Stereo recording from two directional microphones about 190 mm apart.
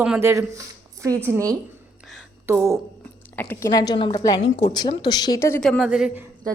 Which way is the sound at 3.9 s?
25° left (ahead or behind).